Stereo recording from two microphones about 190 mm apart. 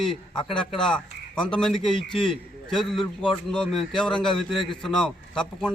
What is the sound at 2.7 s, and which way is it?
A man's voice, centre (ahead or behind).